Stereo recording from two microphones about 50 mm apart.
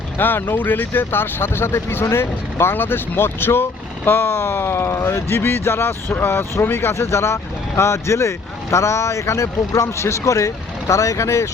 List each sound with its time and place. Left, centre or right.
0.2 s speech: left